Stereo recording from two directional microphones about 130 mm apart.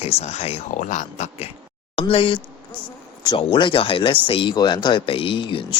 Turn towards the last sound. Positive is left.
turn(degrees=40)  # may be behind; listen again after turning